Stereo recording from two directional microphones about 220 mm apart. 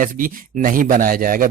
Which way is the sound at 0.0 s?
40° right (ahead or behind).